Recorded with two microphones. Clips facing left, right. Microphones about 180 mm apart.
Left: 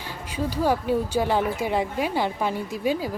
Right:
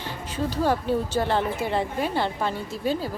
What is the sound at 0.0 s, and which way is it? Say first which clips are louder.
A woman's voice: even; 10° left (ahead or behind).